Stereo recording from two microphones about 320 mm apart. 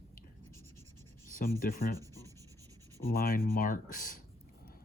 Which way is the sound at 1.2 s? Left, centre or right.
Left.